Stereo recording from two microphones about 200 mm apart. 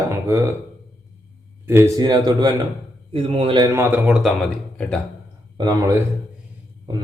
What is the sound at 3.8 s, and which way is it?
Speech, 10° right (ahead or behind).